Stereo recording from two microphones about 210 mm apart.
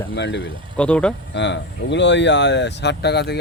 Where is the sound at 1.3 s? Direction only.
55° left (ahead or behind).